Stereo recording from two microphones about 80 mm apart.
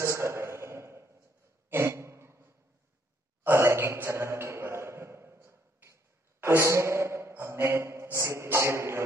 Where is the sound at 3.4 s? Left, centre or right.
Right.